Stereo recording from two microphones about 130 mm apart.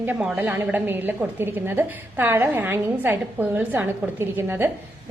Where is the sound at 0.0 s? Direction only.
10° right (ahead or behind).